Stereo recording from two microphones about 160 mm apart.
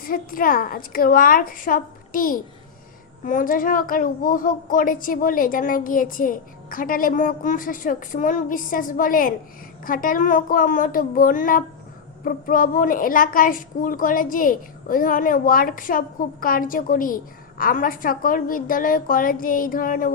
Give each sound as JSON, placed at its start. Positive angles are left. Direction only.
{"t": 0.0, "sound": "a woman's voice", "side_deg": 60}